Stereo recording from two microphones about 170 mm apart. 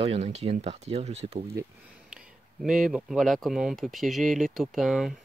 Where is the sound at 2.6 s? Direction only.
5° right (ahead or behind).